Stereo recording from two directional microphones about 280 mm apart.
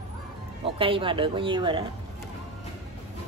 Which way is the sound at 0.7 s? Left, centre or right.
Centre.